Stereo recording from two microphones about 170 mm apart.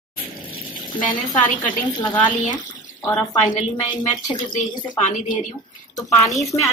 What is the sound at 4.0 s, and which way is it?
Speech, 25° left (ahead or behind).